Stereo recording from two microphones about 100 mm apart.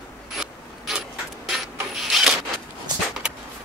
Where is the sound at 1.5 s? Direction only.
Centre (ahead or behind).